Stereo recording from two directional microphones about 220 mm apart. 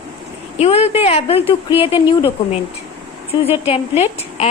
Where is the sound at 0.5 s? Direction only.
30° left (ahead or behind).